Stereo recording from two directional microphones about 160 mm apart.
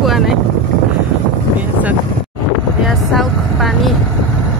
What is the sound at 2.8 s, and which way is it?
Vehicle, centre (ahead or behind).